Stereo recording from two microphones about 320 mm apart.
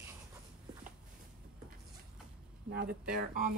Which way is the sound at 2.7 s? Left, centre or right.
Right.